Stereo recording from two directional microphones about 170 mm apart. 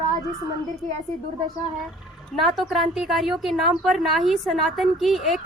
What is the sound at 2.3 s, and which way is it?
A woman's voice, centre (ahead or behind).